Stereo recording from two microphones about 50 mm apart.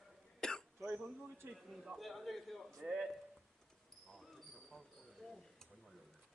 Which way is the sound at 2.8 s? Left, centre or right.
Centre.